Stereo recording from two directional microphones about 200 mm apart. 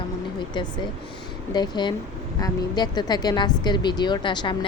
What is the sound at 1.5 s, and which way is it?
Speech, 20° left (ahead or behind).